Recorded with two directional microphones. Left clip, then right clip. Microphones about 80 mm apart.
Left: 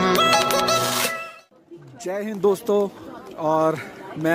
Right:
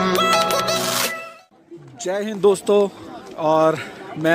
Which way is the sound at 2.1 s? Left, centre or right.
Centre.